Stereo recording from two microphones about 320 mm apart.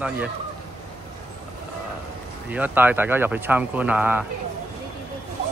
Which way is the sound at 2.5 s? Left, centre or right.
Centre.